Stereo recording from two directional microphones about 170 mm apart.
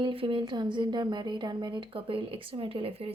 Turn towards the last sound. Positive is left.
turn(degrees=-35)  # may be behind; listen again after turning